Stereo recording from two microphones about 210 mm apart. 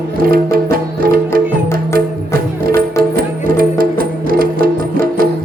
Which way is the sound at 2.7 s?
45° right (ahead or behind).